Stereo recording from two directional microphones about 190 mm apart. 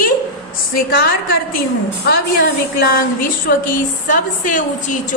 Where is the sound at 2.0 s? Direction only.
55° left (ahead or behind).